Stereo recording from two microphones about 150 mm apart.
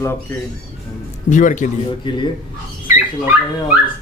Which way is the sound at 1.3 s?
60° left (ahead or behind).